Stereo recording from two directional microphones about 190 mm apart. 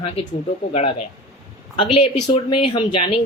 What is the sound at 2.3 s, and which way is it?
Speech, 25° left (ahead or behind).